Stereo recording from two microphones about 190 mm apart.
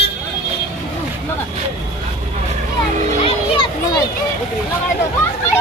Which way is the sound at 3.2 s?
25° left (ahead or behind).